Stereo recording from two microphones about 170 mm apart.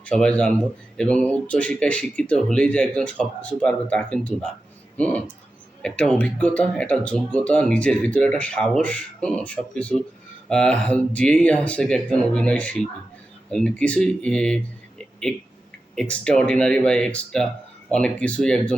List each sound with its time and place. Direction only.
0.0 s speech: 5° left (ahead or behind)